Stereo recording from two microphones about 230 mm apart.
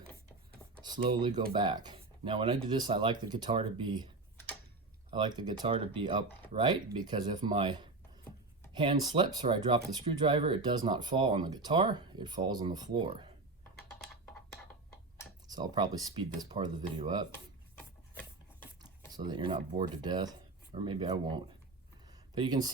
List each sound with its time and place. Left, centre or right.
0.8 s speech: centre
5.1 s speech: centre
15.4 s speech: centre
18.8 s speech: centre
22.0 s a sound: centre